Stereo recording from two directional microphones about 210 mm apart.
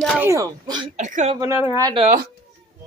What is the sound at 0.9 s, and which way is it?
Speech, 35° right (ahead or behind).